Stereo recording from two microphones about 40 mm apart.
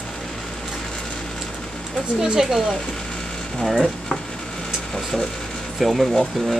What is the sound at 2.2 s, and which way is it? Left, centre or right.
Speech, centre.